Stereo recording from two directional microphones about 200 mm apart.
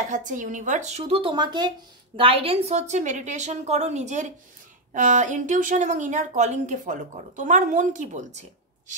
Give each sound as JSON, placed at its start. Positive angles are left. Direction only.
{"t": 0.1, "sound": "a woman's voice", "side_deg": -40}